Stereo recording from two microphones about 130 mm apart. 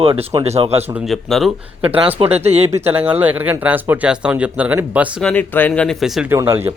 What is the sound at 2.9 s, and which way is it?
Speech, 15° right (ahead or behind).